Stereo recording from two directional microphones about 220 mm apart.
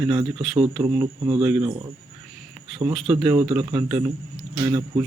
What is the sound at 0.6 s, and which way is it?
Speech, 15° right (ahead or behind).